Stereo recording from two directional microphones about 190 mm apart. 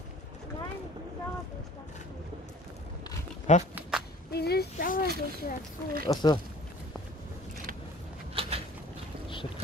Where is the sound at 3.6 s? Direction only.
5° right (ahead or behind).